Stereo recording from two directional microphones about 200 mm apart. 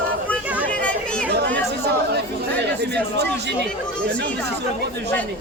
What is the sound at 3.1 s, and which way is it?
Speech, 55° right (ahead or behind).